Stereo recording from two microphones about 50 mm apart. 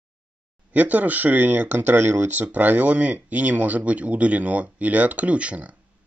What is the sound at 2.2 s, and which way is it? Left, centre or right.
Speech, right.